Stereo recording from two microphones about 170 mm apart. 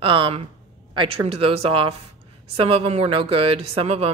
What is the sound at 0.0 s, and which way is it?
Speech, 30° right (ahead or behind).